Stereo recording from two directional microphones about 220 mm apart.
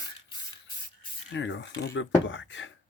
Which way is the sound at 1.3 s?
55° left (ahead or behind).